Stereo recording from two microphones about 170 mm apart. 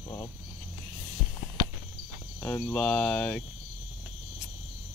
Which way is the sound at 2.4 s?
10° left (ahead or behind).